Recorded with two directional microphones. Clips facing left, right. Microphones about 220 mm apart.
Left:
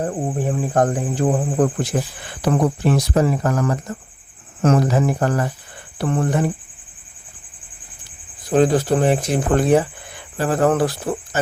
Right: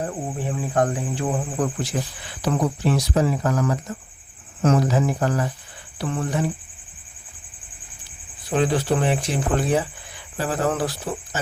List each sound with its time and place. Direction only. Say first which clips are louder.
0.0 s speech: left 5 dB; 40° left (ahead or behind)
8.4 s speech: left 5 dB; 45° left (ahead or behind)